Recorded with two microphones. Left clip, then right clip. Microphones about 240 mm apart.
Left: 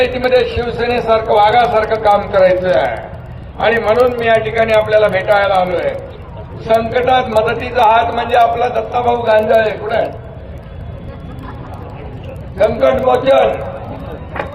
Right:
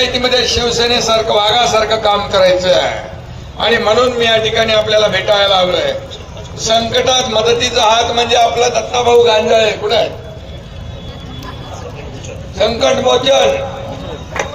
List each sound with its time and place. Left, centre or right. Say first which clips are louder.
0.0 s a man's voice: even; right
12.5 s a man's voice: left 1 dB; right